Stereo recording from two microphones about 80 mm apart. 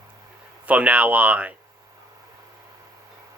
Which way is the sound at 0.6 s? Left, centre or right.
Centre.